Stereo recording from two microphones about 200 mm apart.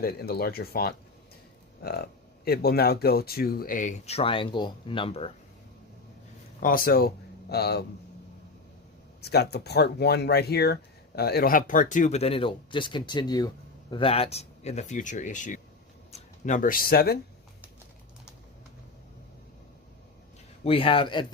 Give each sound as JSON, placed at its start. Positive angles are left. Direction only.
{"t": 0.0, "sound": "speech", "side_deg": 50}
{"t": 6.6, "sound": "a man's voice", "side_deg": 45}
{"t": 9.2, "sound": "speech", "side_deg": 55}
{"t": 20.7, "sound": "speech", "side_deg": 25}